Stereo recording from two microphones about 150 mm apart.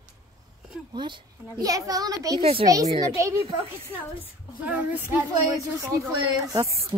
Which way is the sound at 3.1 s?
20° right (ahead or behind).